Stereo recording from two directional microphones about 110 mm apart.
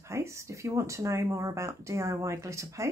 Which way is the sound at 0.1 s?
25° right (ahead or behind).